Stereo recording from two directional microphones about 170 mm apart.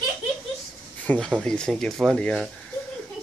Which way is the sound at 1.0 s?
10° left (ahead or behind).